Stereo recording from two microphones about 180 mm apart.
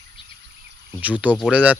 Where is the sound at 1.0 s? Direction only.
10° right (ahead or behind).